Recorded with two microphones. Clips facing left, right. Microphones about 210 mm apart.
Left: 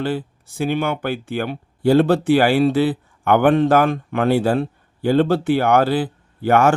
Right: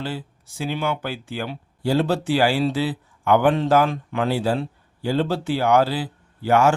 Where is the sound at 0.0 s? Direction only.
55° left (ahead or behind).